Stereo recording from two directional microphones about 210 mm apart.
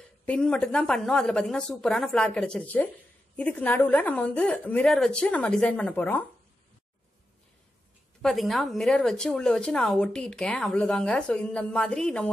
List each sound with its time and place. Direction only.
0.3 s a woman's voice: 5° left (ahead or behind)
8.2 s a woman's voice: centre (ahead or behind)